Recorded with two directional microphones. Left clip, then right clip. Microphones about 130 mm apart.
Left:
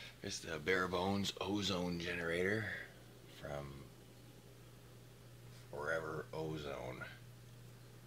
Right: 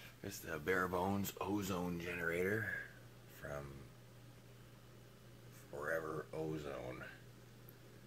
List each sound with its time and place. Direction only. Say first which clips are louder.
0.2 s speech: left 1 dB; 5° left (ahead or behind)
3.4 s speech: left 1 dB; 20° left (ahead or behind)
5.8 s speech: left 1 dB; centre (ahead or behind)